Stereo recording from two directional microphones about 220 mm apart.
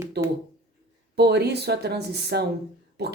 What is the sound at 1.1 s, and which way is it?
Speech, 50° right (ahead or behind).